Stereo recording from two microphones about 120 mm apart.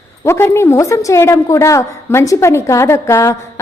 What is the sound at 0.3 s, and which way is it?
A woman's voice, 20° left (ahead or behind).